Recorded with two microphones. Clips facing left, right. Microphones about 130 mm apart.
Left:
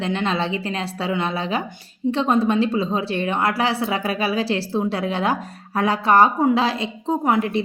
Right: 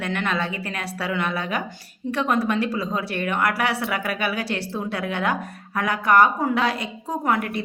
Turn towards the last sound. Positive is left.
turn(degrees=20)  # may be behind; listen again after turning